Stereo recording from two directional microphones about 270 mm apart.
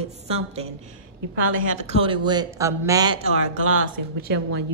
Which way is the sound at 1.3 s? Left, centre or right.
Right.